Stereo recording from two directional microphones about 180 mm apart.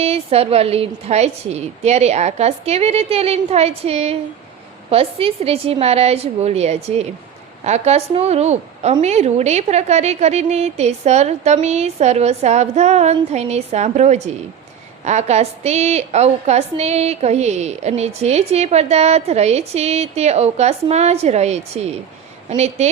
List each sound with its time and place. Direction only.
0.0 s a woman's voice: 35° right (ahead or behind)